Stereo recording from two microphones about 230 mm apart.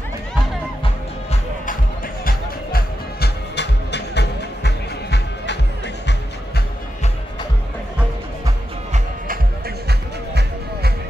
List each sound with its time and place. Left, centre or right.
2.2 s music: left
9.8 s music: right